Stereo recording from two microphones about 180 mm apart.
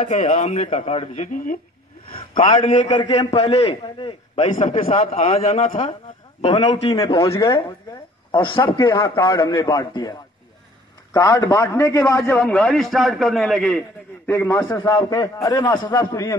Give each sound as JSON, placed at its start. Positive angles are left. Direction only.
{"t": 0.0, "sound": "a man's voice", "side_deg": 35}
{"t": 2.9, "sound": "a man's voice", "side_deg": 25}
{"t": 3.3, "sound": "a man's voice", "side_deg": 35}
{"t": 6.9, "sound": "a man's voice", "side_deg": 20}
{"t": 14.3, "sound": "a man's voice", "side_deg": 15}